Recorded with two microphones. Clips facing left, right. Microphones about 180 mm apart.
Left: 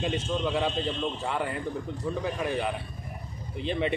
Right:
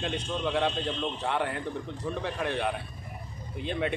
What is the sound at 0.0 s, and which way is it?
Speech, centre (ahead or behind).